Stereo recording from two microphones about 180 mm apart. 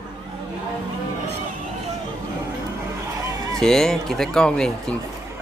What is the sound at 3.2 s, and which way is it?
Fowl, 20° right (ahead or behind).